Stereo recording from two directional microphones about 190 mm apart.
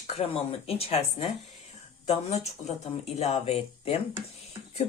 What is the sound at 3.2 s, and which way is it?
Speech, 35° left (ahead or behind).